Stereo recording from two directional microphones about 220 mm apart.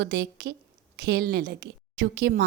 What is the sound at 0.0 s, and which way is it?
A woman's voice, 50° right (ahead or behind).